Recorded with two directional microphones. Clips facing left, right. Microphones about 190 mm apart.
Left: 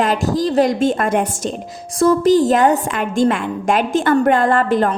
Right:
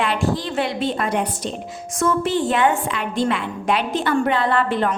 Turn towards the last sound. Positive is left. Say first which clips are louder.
# left 4 dB
turn(degrees=40)  # may be behind; listen again after turning